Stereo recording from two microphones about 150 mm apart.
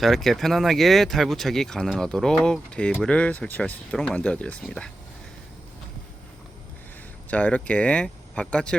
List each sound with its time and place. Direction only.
0.0 s speech: centre (ahead or behind)
7.3 s speech: 10° left (ahead or behind)